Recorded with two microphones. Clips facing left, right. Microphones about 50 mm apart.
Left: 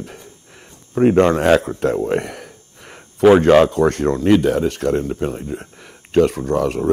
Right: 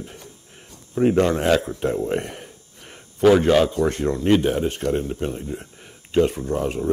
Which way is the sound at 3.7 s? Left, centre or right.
Left.